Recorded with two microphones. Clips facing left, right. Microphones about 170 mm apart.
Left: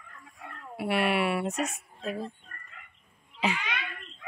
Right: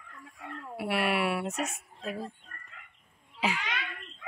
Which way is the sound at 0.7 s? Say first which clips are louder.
Left 2 dB; centre (ahead or behind).